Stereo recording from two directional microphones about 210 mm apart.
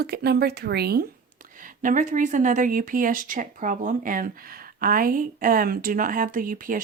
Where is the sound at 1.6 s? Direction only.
40° right (ahead or behind).